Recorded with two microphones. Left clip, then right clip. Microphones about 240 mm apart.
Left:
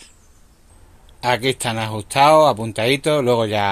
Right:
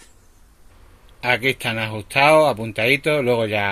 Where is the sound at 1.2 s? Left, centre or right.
Centre.